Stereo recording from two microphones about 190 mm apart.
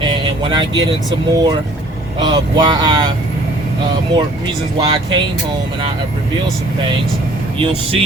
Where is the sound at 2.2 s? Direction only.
20° right (ahead or behind).